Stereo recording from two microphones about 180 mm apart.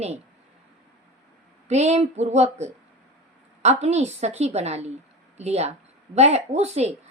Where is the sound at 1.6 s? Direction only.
40° right (ahead or behind).